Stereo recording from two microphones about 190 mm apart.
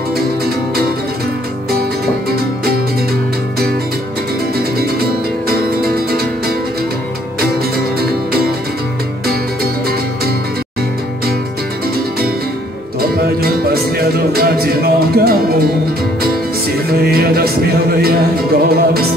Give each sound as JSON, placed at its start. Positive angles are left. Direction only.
{"t": 5.5, "sound": "music", "side_deg": -50}
{"t": 8.0, "sound": "music", "side_deg": -55}
{"t": 13.1, "sound": "music", "side_deg": -55}
{"t": 16.9, "sound": "music", "side_deg": -55}